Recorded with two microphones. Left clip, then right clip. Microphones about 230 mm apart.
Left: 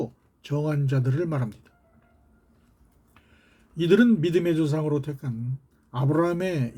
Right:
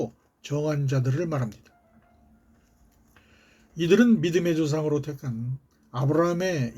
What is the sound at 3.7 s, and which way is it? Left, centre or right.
Speech, centre.